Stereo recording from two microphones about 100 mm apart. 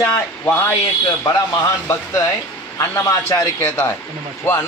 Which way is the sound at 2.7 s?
25° left (ahead or behind).